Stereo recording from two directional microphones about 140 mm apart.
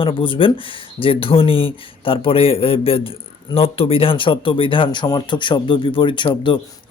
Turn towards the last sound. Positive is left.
turn(degrees=35)  # may be behind; listen again after turning